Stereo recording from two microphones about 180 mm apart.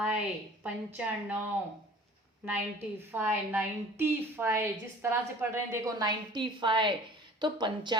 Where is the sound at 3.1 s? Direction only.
10° right (ahead or behind).